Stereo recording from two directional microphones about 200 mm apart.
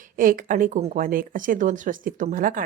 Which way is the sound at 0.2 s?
45° right (ahead or behind).